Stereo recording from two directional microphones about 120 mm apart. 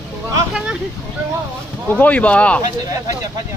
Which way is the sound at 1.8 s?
15° left (ahead or behind).